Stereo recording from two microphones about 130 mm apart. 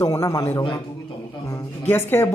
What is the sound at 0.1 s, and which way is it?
A man's voice, 20° left (ahead or behind).